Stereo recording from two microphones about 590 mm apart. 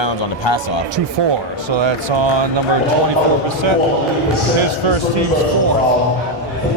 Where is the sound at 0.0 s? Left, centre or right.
Left.